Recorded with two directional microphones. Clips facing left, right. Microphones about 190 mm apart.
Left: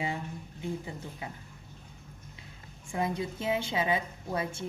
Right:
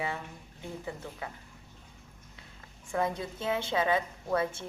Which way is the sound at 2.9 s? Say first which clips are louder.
Even; 15° left (ahead or behind).